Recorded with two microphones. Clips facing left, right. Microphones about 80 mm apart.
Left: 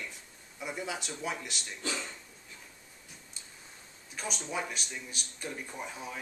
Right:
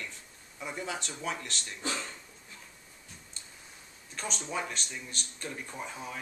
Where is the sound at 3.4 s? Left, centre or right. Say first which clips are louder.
Right 1 dB; centre.